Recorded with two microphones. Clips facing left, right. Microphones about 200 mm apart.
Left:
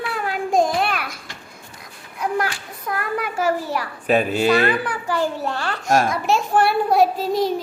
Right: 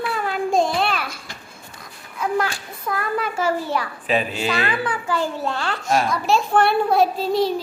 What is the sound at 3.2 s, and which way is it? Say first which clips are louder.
Speech: left 1 dB; 15° left (ahead or behind).